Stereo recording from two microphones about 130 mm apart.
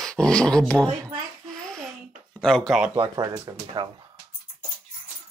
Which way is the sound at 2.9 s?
40° right (ahead or behind).